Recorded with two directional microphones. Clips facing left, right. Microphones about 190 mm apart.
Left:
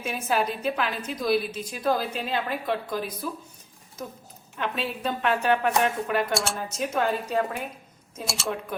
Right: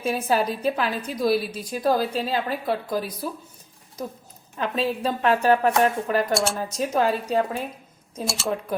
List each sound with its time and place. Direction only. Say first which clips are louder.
0.0 s a woman's voice: right 4 dB; 35° right (ahead or behind)
4.5 s a woman's voice: right 5 dB; 35° right (ahead or behind)
6.3 s speech: right 4 dB; centre (ahead or behind)
6.7 s a woman's voice: right 3 dB; 35° right (ahead or behind)
8.2 s speech: right 4 dB; centre (ahead or behind)